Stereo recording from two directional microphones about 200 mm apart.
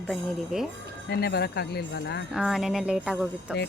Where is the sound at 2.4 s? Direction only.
Centre (ahead or behind).